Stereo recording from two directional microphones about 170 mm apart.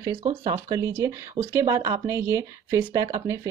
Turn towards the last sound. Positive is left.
turn(degrees=-20)  # may be behind; listen again after turning